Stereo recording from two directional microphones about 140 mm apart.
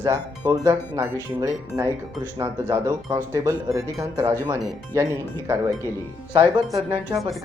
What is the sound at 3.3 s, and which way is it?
Speech, 20° right (ahead or behind).